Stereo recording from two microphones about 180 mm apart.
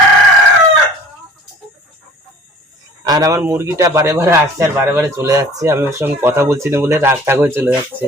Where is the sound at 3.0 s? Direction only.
20° right (ahead or behind).